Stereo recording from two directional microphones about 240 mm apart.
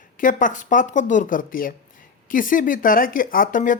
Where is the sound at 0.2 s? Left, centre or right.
Left.